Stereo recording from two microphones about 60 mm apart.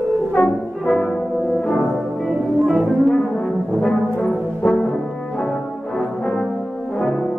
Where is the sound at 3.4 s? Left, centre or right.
Centre.